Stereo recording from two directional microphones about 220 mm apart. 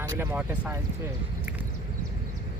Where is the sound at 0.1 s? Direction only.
10° right (ahead or behind).